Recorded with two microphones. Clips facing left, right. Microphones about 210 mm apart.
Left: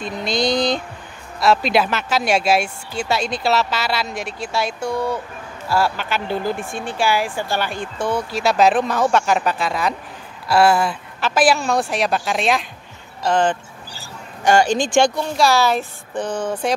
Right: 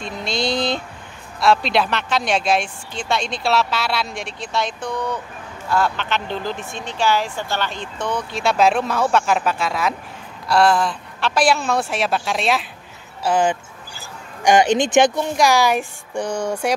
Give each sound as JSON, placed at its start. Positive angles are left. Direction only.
{"t": 0.0, "sound": "speech", "side_deg": 0}